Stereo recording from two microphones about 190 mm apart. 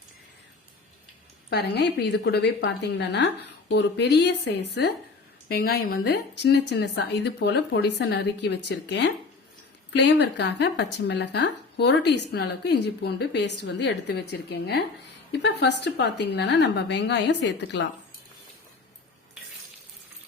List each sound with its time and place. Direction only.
1.5 s speech: 60° left (ahead or behind)